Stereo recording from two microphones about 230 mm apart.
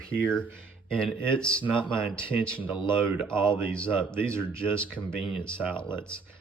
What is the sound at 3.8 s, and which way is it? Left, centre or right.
Speech, centre.